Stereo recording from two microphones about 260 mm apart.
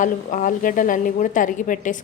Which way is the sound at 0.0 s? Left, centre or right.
Left.